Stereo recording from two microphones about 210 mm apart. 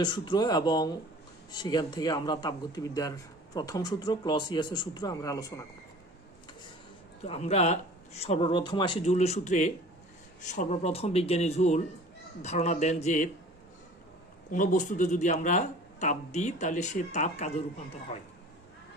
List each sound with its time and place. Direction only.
0.0 s a man's voice: 20° left (ahead or behind)
7.3 s a man's voice: 30° left (ahead or behind)
14.5 s speech: 40° left (ahead or behind)